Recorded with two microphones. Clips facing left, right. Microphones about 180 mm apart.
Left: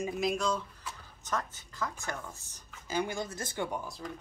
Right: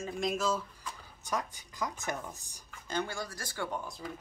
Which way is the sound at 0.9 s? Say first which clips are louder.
Even; 15° right (ahead or behind).